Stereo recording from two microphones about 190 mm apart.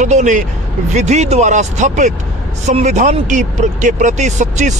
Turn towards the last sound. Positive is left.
turn(degrees=-40)  # may be behind; listen again after turning